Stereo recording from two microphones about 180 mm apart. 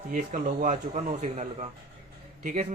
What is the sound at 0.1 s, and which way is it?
Speech, 45° right (ahead or behind).